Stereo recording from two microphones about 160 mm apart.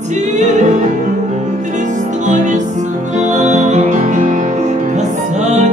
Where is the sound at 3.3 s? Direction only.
45° right (ahead or behind).